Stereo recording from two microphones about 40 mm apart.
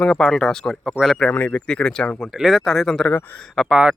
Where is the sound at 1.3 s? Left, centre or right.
Left.